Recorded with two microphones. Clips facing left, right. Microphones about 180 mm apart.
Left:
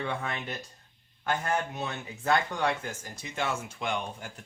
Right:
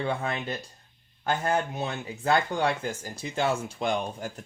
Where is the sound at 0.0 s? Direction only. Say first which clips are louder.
Right 4 dB; 30° right (ahead or behind).